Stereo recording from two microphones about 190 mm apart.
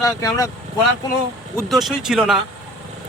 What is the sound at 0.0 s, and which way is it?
Speech, 15° left (ahead or behind).